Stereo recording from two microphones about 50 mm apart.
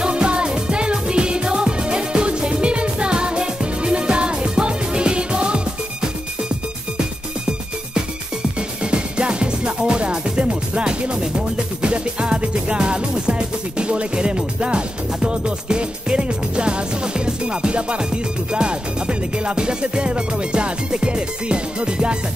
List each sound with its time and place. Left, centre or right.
0.0 s music: centre
8.9 s music: centre